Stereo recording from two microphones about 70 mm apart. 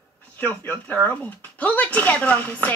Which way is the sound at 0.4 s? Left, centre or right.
Left.